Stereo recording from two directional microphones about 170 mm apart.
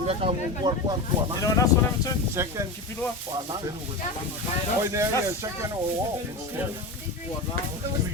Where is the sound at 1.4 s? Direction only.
20° left (ahead or behind).